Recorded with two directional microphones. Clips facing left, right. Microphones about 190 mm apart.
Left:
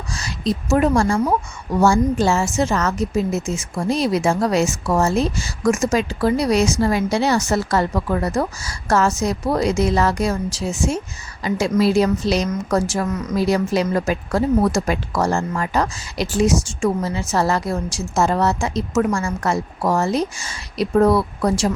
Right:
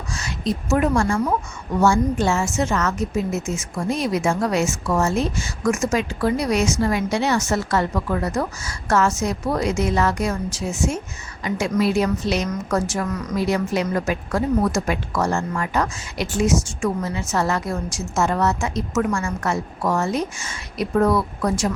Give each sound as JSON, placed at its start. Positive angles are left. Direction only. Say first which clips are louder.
{"t": 0.1, "sound": "a woman's voice", "louder": "left 2 dB", "side_deg": 35}